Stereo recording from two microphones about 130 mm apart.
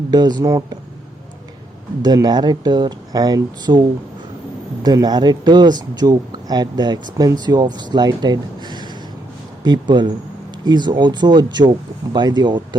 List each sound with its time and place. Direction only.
0.1 s speech: 30° right (ahead or behind)
2.0 s speech: 30° right (ahead or behind)